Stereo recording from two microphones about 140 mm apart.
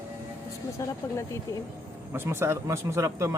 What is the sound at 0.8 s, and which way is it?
Speech, 20° left (ahead or behind).